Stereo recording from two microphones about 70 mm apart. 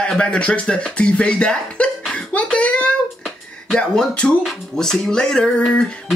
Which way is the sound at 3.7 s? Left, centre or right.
Centre.